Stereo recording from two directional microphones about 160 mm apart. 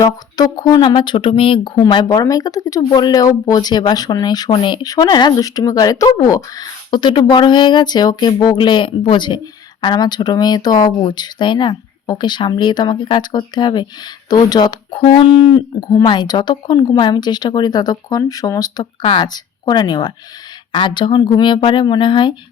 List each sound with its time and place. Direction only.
0.0 s speech: 25° left (ahead or behind)
15.8 s speech: 25° left (ahead or behind)